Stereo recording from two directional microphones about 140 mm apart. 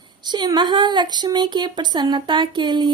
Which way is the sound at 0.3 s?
30° right (ahead or behind).